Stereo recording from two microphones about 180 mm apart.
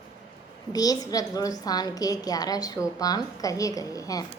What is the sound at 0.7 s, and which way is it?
A woman's voice, 20° left (ahead or behind).